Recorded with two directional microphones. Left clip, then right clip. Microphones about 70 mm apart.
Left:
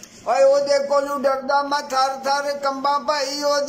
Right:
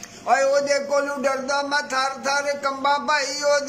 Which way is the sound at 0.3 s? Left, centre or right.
Left.